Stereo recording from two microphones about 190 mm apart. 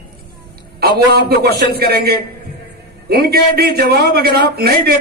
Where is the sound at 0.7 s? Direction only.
55° right (ahead or behind).